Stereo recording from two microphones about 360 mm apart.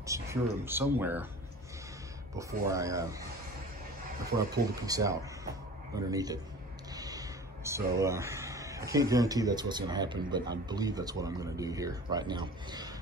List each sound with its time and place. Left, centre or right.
0.0 s speech: centre
2.3 s speech: centre
4.8 s speech: centre